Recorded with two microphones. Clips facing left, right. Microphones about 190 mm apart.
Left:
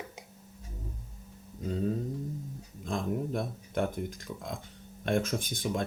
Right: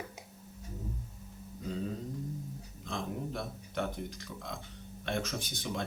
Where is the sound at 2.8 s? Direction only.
50° left (ahead or behind).